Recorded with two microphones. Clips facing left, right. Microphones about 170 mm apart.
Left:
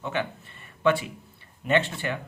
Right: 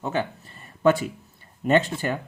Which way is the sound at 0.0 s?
40° right (ahead or behind).